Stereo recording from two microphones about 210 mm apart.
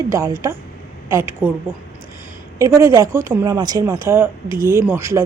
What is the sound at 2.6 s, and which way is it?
A woman's voice, 15° right (ahead or behind).